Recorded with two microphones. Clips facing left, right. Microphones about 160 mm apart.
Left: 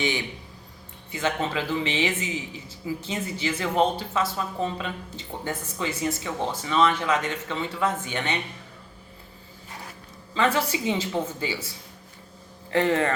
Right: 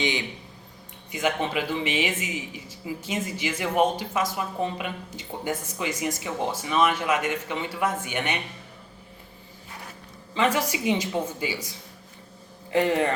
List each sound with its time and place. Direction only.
0.0 s speech: 20° right (ahead or behind)
10.3 s speech: 15° right (ahead or behind)
12.7 s speech: 15° right (ahead or behind)